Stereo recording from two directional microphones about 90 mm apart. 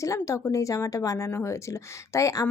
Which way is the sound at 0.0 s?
35° left (ahead or behind).